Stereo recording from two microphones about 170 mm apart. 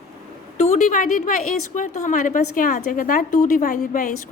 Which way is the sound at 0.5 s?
45° left (ahead or behind).